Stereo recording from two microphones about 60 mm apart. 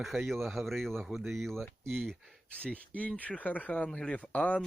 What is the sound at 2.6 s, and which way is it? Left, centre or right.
Speech, left.